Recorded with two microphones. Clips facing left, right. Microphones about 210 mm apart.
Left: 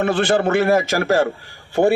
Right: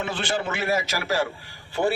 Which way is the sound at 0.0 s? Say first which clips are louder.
Left 10 dB; 55° left (ahead or behind).